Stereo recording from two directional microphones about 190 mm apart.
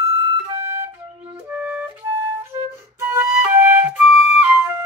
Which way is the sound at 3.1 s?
10° right (ahead or behind).